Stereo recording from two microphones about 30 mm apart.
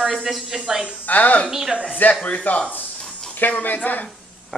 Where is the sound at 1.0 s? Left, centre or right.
Left.